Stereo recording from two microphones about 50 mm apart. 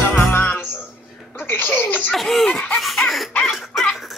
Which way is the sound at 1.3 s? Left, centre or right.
Left.